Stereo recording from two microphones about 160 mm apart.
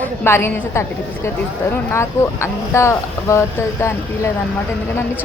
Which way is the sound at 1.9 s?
15° left (ahead or behind).